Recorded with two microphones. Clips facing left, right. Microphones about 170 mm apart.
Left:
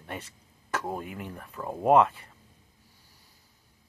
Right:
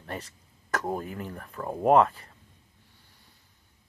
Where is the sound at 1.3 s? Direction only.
5° left (ahead or behind).